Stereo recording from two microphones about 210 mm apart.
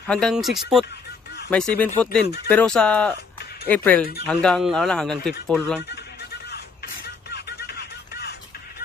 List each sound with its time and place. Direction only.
0.0 s a man's voice: centre (ahead or behind)
4.0 s speech: 45° left (ahead or behind)
4.3 s a man's voice: 5° left (ahead or behind)
7.2 s music: 50° left (ahead or behind)